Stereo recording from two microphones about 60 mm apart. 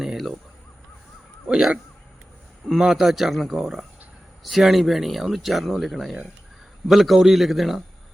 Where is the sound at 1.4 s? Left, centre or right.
Centre.